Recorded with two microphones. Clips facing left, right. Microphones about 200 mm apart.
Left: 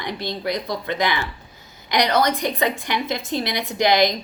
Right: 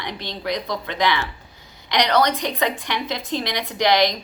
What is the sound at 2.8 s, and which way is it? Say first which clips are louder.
Speech: left 2 dB; 45° left (ahead or behind).